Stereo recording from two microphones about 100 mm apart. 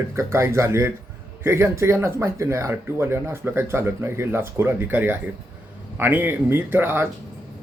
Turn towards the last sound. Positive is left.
turn(degrees=-20)  # may be behind; listen again after turning